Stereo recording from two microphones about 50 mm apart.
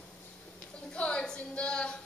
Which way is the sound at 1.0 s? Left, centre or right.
Left.